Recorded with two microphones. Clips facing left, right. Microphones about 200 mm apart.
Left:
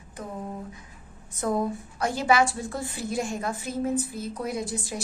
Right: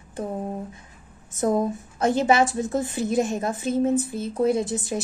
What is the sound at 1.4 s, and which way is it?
A woman's voice, 20° right (ahead or behind).